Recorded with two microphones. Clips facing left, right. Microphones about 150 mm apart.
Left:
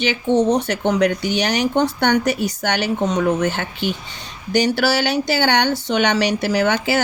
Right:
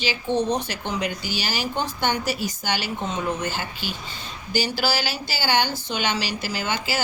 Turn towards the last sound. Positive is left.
turn(degrees=65)  # may be behind; listen again after turning